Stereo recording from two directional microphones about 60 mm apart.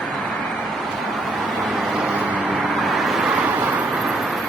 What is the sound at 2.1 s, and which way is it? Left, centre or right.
Vehicle, centre.